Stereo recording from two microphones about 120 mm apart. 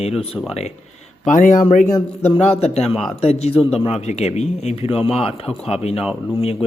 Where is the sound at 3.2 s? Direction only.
60° left (ahead or behind).